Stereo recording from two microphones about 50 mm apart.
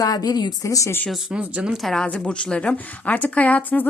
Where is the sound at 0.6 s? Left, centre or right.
Left.